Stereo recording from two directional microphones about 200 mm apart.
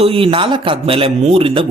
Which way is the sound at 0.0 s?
30° right (ahead or behind).